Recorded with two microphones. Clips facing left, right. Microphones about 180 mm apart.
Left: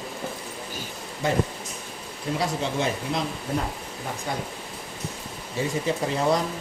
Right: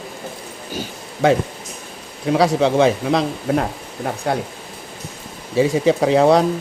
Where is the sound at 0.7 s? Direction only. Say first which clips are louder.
Right 6 dB; 80° right.